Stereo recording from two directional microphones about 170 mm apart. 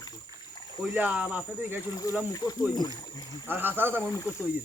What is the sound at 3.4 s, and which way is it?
Speech, 10° right (ahead or behind).